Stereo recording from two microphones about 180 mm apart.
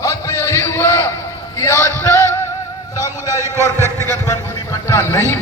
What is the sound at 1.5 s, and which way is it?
Music, 15° left (ahead or behind).